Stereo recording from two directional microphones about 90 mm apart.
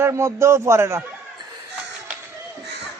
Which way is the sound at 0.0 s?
35° right (ahead or behind).